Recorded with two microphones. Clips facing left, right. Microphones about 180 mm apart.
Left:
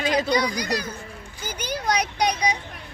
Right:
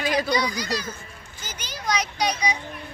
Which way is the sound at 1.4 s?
60° left (ahead or behind).